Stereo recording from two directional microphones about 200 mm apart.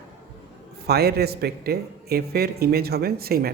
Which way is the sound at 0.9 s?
50° right (ahead or behind).